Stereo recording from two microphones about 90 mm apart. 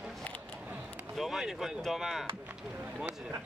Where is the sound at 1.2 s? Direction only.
Centre (ahead or behind).